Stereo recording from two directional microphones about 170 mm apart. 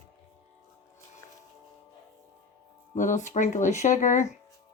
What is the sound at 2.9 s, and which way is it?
A woman's voice, 45° left (ahead or behind).